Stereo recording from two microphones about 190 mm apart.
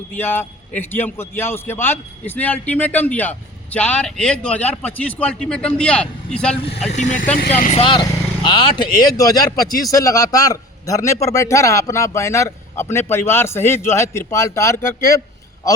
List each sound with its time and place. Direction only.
0.1 s speech: 10° left (ahead or behind)
6.9 s speech: 40° left (ahead or behind); by 15.2 s 15° left (ahead or behind)